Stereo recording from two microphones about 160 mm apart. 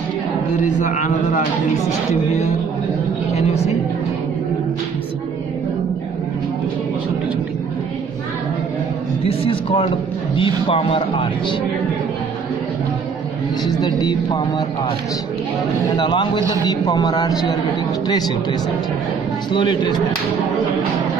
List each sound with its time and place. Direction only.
0.7 s a man's voice: 50° left (ahead or behind)
3.3 s a man's voice: 40° left (ahead or behind)
9.2 s a man's voice: 35° left (ahead or behind)
13.7 s a woman's voice: 25° left (ahead or behind)
15.9 s a woman's voice: 30° left (ahead or behind)